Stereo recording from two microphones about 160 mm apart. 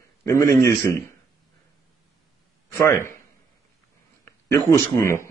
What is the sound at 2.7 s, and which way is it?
Speech, 15° left (ahead or behind).